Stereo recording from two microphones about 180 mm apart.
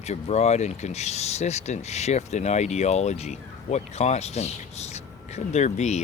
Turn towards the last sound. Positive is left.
turn(degrees=40)  # may be behind; listen again after turning